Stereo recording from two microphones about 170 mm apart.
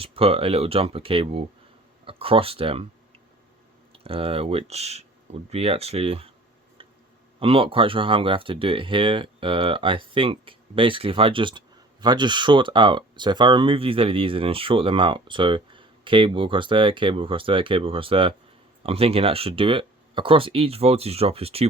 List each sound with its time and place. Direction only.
0.0 s speech: 35° right (ahead or behind)
3.9 s speech: 35° right (ahead or behind)
7.3 s speech: 35° right (ahead or behind)